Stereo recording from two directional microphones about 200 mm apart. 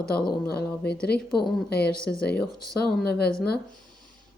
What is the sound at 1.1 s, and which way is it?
Speech, 50° left (ahead or behind).